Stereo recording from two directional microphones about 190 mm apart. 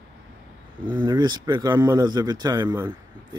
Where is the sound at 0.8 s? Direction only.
25° right (ahead or behind).